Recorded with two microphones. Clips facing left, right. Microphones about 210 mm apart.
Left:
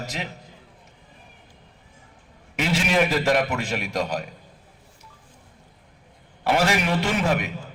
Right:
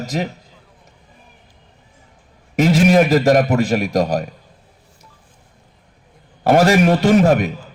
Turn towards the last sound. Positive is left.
turn(degrees=-40)  # may be behind; listen again after turning